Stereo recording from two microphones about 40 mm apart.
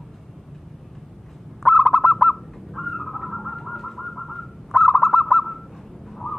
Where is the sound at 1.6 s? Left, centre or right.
Centre.